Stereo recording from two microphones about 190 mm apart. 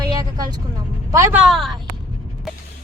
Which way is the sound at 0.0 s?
20° right (ahead or behind).